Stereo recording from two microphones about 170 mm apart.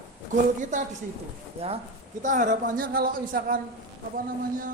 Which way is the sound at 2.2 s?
50° right (ahead or behind).